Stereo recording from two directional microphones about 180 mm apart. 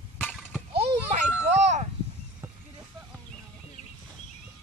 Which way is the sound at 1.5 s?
40° right (ahead or behind).